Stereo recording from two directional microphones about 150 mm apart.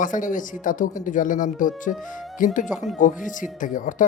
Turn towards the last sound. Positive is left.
turn(degrees=60)  # may be behind; listen again after turning